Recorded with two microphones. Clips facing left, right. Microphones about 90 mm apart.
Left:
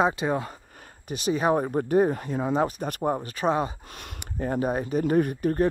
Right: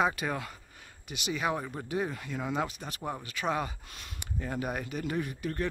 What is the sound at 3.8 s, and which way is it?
Speech, 45° left (ahead or behind).